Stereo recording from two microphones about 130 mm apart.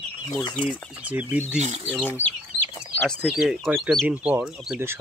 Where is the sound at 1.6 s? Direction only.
50° right (ahead or behind).